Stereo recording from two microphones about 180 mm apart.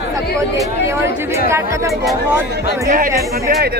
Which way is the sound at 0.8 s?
15° right (ahead or behind).